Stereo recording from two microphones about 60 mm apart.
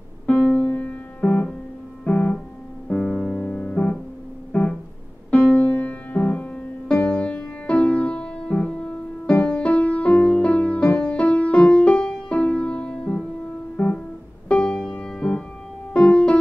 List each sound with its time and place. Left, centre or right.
0.3 s music: left
13.8 s music: left
14.5 s music: centre
15.0 s keyboard: centre
15.9 s music: centre